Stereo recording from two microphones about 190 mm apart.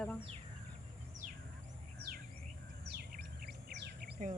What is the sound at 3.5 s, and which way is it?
Chirp, 55° right (ahead or behind).